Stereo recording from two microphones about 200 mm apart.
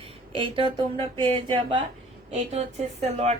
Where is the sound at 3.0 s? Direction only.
35° right (ahead or behind).